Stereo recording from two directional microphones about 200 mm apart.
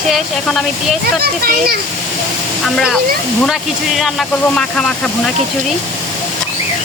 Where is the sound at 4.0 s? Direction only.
5° left (ahead or behind).